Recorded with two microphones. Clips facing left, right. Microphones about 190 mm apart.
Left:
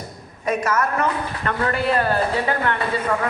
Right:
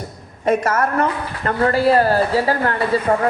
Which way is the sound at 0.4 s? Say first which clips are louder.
Right 4 dB; 30° right (ahead or behind).